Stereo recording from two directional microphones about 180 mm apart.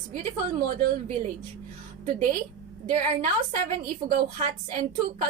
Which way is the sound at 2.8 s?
45° right (ahead or behind).